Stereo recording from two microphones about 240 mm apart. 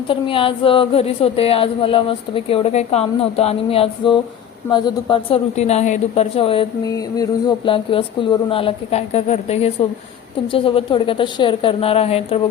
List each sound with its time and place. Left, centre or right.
0.1 s speech: left